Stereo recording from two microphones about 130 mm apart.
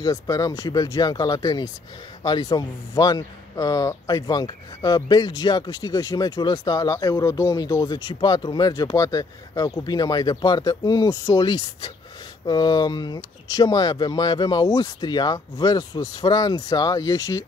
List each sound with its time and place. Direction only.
0.0 s a man's voice: 30° left (ahead or behind)